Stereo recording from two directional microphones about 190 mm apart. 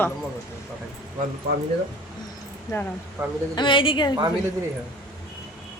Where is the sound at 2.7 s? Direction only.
20° left (ahead or behind).